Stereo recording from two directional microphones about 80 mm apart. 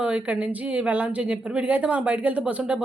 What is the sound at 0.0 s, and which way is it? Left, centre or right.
A woman's voice, centre.